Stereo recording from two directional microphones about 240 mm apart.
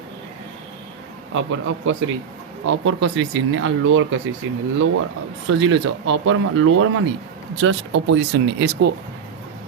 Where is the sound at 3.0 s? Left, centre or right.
Right.